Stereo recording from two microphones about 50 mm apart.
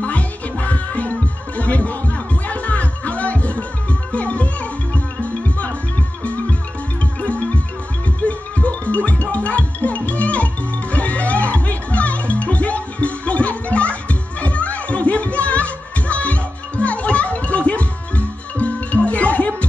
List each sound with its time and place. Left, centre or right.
0.0 s music: left